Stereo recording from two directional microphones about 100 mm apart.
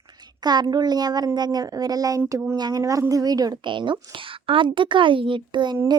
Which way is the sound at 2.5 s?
40° right (ahead or behind).